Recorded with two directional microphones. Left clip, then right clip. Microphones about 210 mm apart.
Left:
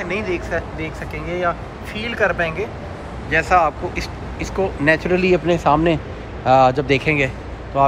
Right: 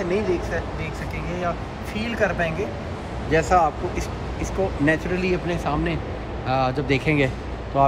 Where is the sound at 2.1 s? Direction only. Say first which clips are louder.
Left 4 dB; 10° right (ahead or behind).